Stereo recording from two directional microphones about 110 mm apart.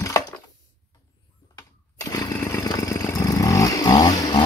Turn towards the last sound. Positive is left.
turn(degrees=35)  # may be behind; listen again after turning